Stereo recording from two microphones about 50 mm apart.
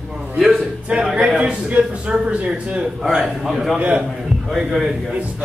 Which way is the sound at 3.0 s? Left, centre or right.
Centre.